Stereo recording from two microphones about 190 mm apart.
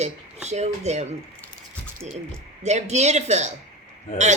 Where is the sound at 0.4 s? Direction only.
35° right (ahead or behind).